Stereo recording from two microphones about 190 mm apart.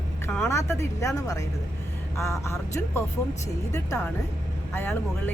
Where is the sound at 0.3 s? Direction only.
10° left (ahead or behind).